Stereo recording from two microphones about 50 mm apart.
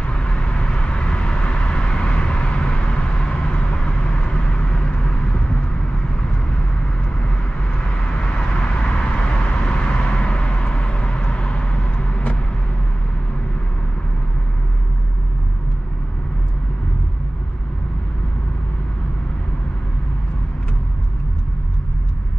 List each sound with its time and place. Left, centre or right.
0.0 s vehicle: left
7.0 s vehicle: left